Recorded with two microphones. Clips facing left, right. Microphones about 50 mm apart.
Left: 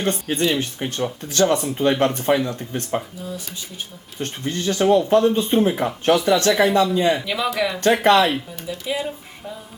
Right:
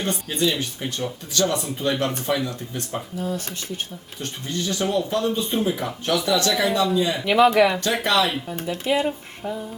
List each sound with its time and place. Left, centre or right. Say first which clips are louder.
0.0 s speech: left 2 dB; left
3.2 s speech: right 4 dB; right
4.2 s speech: left 3 dB; left
7.3 s speech: right 6 dB; right
8.0 s speech: left 6 dB; left
8.4 s speech: right 3 dB; right
9.0 s a sound: right 4 dB; right